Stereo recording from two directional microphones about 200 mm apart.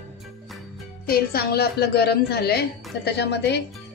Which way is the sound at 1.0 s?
50° left (ahead or behind).